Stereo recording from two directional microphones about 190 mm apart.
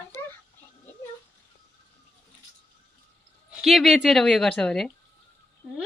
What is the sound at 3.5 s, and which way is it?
Speech, centre (ahead or behind).